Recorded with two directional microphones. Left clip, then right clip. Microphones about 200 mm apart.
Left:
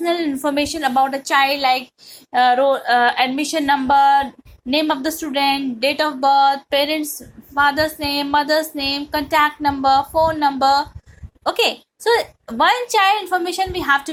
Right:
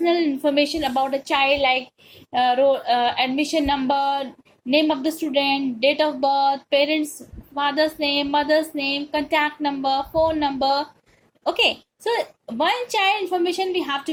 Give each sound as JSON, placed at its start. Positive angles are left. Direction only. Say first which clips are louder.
{"t": 0.0, "sound": "a woman's voice", "louder": "even", "side_deg": 50}
{"t": 2.3, "sound": "a woman's voice", "louder": "left 3 dB", "side_deg": 45}
{"t": 6.7, "sound": "a woman's voice", "louder": "left 1 dB", "side_deg": 0}
{"t": 7.6, "sound": "a woman's voice", "louder": "left 4 dB", "side_deg": 50}